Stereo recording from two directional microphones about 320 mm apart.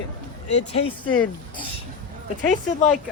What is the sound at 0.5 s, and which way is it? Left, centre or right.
Speech, centre.